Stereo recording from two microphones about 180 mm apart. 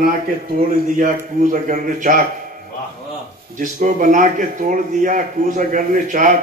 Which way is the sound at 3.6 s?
45° right (ahead or behind).